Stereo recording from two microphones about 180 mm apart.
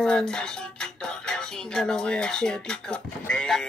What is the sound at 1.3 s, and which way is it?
Dishes, 5° left (ahead or behind).